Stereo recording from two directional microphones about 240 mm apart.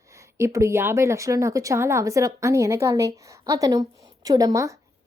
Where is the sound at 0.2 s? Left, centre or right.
Centre.